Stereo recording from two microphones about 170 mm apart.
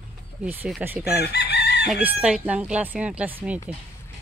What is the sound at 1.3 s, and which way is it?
Chicken, 75° left (ahead or behind).